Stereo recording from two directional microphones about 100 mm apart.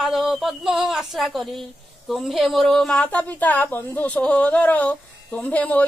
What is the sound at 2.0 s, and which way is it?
A woman's voice, centre (ahead or behind).